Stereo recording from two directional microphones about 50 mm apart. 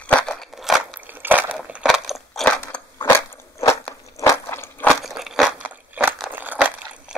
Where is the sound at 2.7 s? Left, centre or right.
Left.